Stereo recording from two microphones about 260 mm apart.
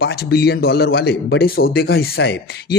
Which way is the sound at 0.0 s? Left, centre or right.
Left.